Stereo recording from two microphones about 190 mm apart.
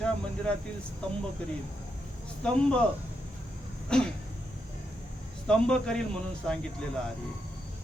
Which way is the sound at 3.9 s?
5° left (ahead or behind).